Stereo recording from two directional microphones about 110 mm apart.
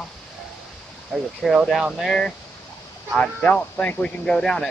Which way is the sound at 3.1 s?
15° left (ahead or behind).